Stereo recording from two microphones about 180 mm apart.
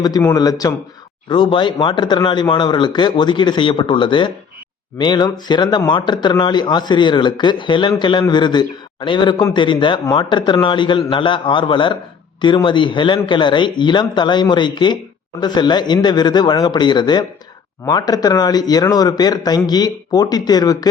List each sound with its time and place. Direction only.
0.3 s speech: 20° left (ahead or behind)